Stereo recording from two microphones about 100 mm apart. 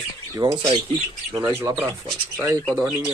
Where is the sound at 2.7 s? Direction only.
10° right (ahead or behind).